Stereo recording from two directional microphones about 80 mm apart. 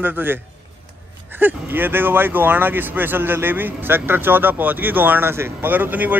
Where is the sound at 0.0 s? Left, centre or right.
Right.